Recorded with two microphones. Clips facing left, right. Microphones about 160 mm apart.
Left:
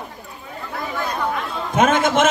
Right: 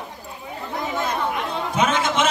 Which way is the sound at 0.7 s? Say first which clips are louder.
Right 1 dB; 20° right (ahead or behind).